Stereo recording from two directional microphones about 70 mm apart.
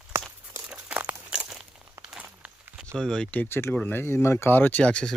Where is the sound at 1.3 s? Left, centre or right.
Centre.